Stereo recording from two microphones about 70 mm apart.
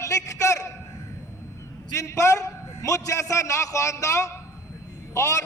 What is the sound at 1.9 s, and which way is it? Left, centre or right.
A man's voice, left.